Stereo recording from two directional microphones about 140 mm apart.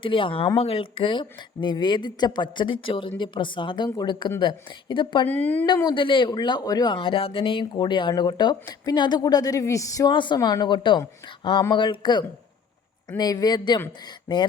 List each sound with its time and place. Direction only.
0.0 s speech: 40° left (ahead or behind)
5.3 s speech: 15° left (ahead or behind)
5.6 s speech: 30° left (ahead or behind)
6.9 s speech: 40° left (ahead or behind)